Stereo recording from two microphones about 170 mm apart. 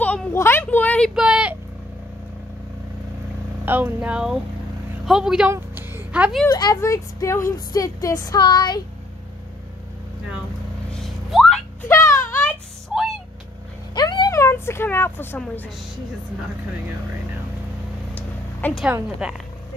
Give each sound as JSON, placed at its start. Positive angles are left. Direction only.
{"t": 0.0, "sound": "a sound", "side_deg": 10}
{"t": 1.1, "sound": "speech", "side_deg": -5}
{"t": 3.6, "sound": "speech", "side_deg": -10}
{"t": 6.4, "sound": "speech", "side_deg": 20}
{"t": 10.9, "sound": "vehicle", "side_deg": 0}
{"t": 11.9, "sound": "music", "side_deg": 15}
{"t": 13.9, "sound": "a sound", "side_deg": 25}
{"t": 18.6, "sound": "a woman's voice", "side_deg": 10}
{"t": 19.0, "sound": "speech", "side_deg": -5}